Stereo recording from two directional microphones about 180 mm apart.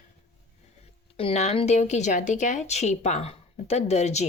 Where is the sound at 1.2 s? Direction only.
35° left (ahead or behind).